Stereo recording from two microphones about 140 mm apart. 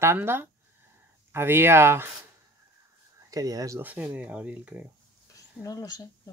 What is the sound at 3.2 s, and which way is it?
Speech, 25° right (ahead or behind).